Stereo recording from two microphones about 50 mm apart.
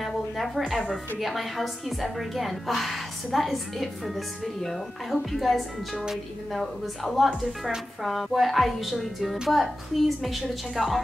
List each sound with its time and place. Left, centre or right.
0.0 s a woman's voice: centre